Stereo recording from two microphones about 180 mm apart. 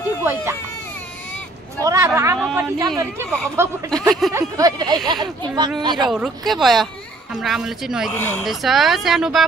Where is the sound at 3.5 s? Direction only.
15° right (ahead or behind).